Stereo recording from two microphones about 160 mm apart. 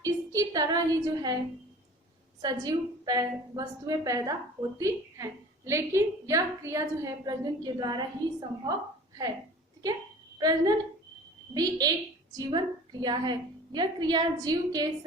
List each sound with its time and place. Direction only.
0.0 s a woman's voice: 20° right (ahead or behind)
2.4 s a woman's voice: 25° right (ahead or behind)
10.3 s a woman's voice: 25° right (ahead or behind)